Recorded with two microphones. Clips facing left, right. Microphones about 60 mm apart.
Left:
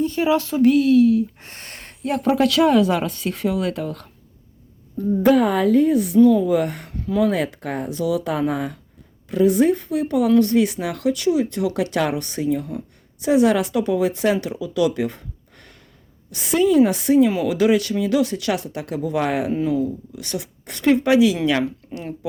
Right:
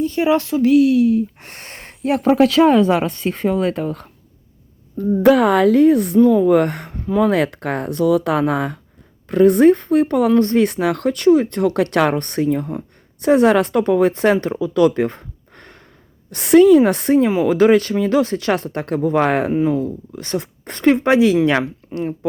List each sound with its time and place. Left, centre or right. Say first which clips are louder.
0.2 s a sound: right 4 dB; centre
0.5 s speech: right 1 dB; centre
1.4 s a sound: right 2 dB; right
2.0 s speech: right 4 dB; right
4.9 s speech: right 3 dB; right
6.1 s speech: left 1 dB; right
6.4 s speech: right 6 dB; right
6.9 s a sound: right 2 dB; right
7.3 s speech: right 4 dB; right
10.3 s speech: right 2 dB; right
16.3 s speech: right 8 dB; right
19.5 s speech: right 3 dB; right
21.8 s a sound: right 4 dB; right